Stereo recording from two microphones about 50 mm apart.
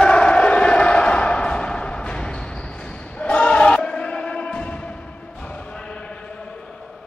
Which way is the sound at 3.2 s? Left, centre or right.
Left.